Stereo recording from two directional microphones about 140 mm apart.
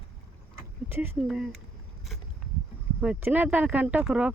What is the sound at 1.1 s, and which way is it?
Speech, 5° right (ahead or behind).